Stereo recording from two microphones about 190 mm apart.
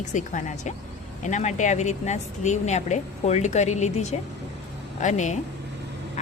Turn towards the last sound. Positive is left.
turn(degrees=40)  # may be behind; listen again after turning